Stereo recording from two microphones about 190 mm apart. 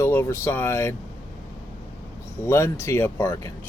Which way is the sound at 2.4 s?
15° left (ahead or behind).